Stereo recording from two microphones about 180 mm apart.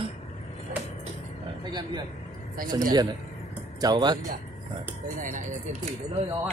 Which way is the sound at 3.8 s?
25° right (ahead or behind).